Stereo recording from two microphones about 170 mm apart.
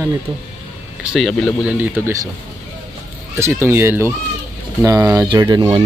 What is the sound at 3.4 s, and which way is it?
Speech, 15° right (ahead or behind).